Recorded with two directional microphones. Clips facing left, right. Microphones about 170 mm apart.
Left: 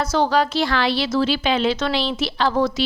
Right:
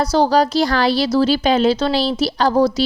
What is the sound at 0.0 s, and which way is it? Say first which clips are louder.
A woman's voice: right 4 dB; 35° right (ahead or behind).